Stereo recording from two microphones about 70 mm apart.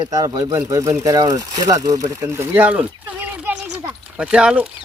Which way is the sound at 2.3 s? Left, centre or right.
Right.